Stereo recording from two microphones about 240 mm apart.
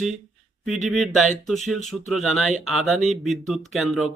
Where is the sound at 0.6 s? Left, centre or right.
Centre.